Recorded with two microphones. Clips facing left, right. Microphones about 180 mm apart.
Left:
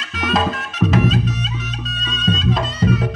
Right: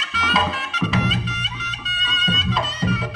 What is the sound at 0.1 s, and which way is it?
Music, 45° left (ahead or behind).